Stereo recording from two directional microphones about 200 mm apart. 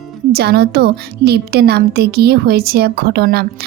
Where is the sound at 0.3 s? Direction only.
50° right (ahead or behind).